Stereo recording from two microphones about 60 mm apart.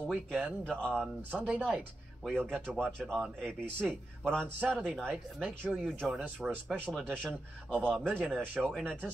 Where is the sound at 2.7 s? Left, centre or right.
Centre.